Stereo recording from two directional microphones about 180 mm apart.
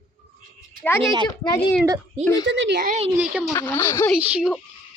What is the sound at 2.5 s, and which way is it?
Speech, 75° right (ahead or behind).